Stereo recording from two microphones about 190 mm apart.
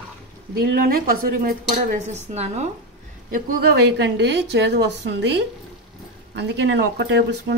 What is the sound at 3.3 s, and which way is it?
Speech, 50° right (ahead or behind).